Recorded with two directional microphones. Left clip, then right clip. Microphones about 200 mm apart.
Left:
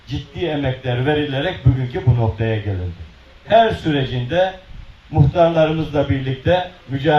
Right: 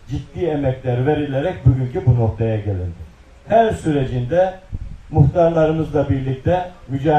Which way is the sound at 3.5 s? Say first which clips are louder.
Left 1 dB; 5° right (ahead or behind).